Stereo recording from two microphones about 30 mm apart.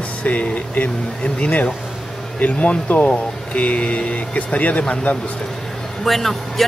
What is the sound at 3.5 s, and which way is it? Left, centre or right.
Speech, left.